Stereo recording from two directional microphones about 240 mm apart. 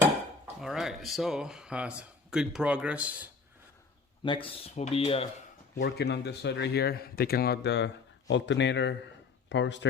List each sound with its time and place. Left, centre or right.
0.0 s speech: centre
4.2 s speech: left
5.7 s speech: left